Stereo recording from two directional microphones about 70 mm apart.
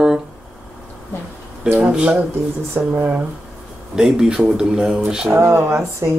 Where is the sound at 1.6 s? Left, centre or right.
Centre.